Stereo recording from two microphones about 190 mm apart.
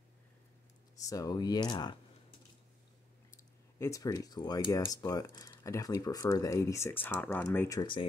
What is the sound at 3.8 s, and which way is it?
Speech, 15° left (ahead or behind).